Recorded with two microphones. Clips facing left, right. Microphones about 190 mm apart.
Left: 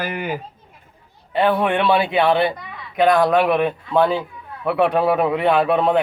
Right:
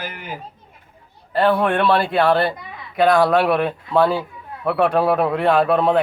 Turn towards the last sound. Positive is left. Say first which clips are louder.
# right 1 dB
turn(degrees=0)  # may be behind; listen again after turning